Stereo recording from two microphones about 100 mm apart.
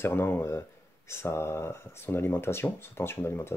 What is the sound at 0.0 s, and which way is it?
Speech, 25° left (ahead or behind).